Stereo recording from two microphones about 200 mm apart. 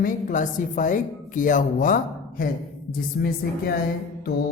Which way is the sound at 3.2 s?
50° left (ahead or behind).